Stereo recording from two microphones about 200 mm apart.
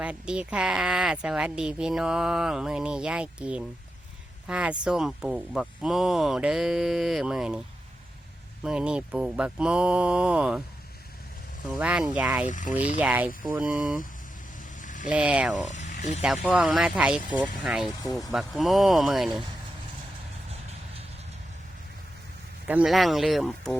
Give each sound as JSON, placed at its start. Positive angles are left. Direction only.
{"t": 0.0, "sound": "speech", "side_deg": -5}
{"t": 8.6, "sound": "speech", "side_deg": -5}
{"t": 11.7, "sound": "speech", "side_deg": -5}
{"t": 12.5, "sound": "speech", "side_deg": 40}
{"t": 13.0, "sound": "speech", "side_deg": -5}
{"t": 14.8, "sound": "vehicle", "side_deg": 40}
{"t": 15.1, "sound": "speech", "side_deg": -5}
{"t": 15.7, "sound": "a sound", "side_deg": 35}
{"t": 16.2, "sound": "speech", "side_deg": -5}
{"t": 18.0, "sound": "speech", "side_deg": 20}
{"t": 18.3, "sound": "speech", "side_deg": 0}
{"t": 20.5, "sound": "vehicle", "side_deg": -30}
{"t": 22.6, "sound": "speech", "side_deg": -5}